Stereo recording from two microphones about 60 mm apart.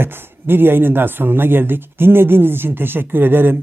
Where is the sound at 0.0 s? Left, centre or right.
Right.